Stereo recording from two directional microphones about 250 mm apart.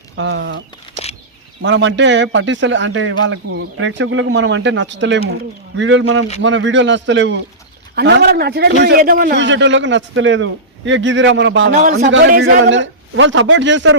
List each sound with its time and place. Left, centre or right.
0.2 s a man's voice: right
1.6 s a man's voice: right
11.7 s speech: right
12.0 s a man's voice: right
12.3 s speech: right
12.6 s a man's voice: right